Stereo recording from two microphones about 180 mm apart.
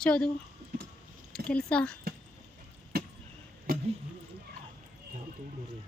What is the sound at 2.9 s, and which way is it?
Vehicle, 60° right (ahead or behind).